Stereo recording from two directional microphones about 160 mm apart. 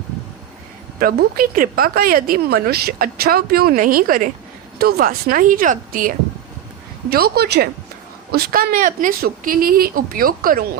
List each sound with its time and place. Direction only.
0.9 s a woman's voice: 65° right (ahead or behind)
7.1 s a woman's voice: 80° right
8.3 s a woman's voice: 75° right (ahead or behind)